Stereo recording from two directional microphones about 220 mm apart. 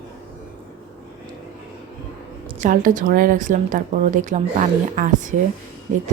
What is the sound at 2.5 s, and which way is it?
Speech, 35° right (ahead or behind).